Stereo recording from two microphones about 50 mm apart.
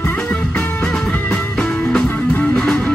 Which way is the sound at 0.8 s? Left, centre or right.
Centre.